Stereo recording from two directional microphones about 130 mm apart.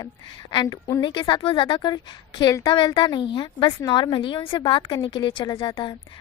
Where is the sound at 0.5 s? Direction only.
30° left (ahead or behind).